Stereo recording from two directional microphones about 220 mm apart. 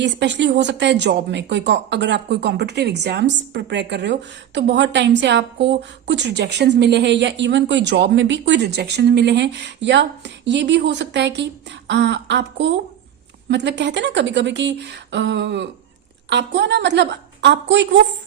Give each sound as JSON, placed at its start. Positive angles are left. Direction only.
{"t": 0.0, "sound": "speech", "side_deg": -55}